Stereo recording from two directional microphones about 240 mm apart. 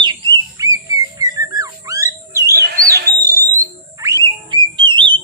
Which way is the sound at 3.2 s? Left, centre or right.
Centre.